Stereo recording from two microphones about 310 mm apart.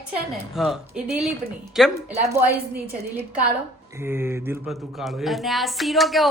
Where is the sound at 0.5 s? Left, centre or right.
Centre.